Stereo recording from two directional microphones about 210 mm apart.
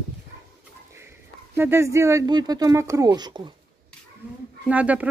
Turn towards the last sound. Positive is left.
turn(degrees=-5)  # may be behind; listen again after turning